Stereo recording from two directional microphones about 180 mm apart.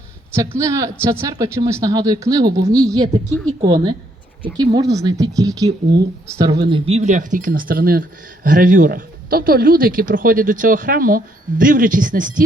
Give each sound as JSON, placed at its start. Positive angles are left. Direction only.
{"t": 0.3, "sound": "speech", "side_deg": -15}